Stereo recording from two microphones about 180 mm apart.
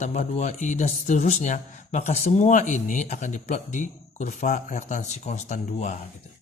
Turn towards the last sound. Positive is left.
turn(degrees=40)  # may be behind; listen again after turning